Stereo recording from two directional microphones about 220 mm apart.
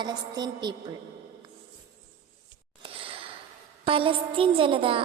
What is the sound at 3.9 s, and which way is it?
A woman's voice, 25° right (ahead or behind).